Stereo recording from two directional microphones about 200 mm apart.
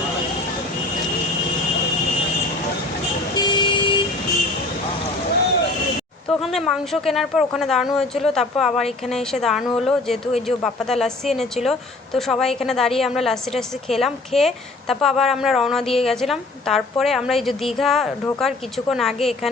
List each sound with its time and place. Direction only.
3.3 s vehicle: 20° left (ahead or behind)
6.2 s a woman's voice: centre (ahead or behind)